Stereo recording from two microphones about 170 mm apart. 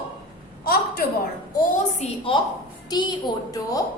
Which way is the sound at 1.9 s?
35° left (ahead or behind).